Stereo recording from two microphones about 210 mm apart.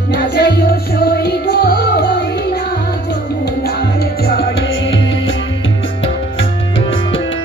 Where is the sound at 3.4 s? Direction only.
50° left (ahead or behind); by 5.2 s 65° left (ahead or behind).